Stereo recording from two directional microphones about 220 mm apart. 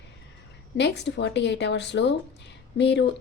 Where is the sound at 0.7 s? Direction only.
50° left (ahead or behind).